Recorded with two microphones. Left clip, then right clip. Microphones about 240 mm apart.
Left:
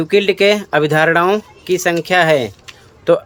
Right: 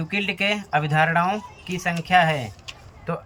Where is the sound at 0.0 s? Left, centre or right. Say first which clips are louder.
Left 12 dB; left.